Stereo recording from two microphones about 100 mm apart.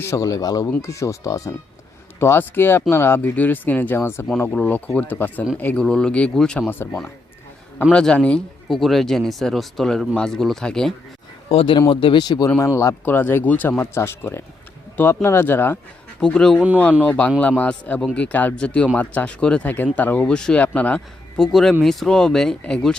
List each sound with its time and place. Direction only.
0.0 s speech: 30° left (ahead or behind); by 6.7 s 5° left (ahead or behind)
6.7 s speech: 20° left (ahead or behind)
7.9 s speech: 10° left (ahead or behind)
11.5 s speech: 60° left (ahead or behind)
12.5 s speech: 25° left (ahead or behind)
16.2 s speech: 5° left (ahead or behind)
16.6 s speech: 15° right (ahead or behind)
17.0 s speech: 15° left (ahead or behind)